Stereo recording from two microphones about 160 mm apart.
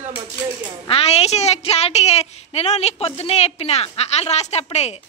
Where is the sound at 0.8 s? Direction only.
40° left (ahead or behind).